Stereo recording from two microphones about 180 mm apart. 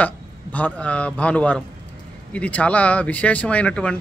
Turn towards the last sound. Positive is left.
turn(degrees=5)  # may be behind; listen again after turning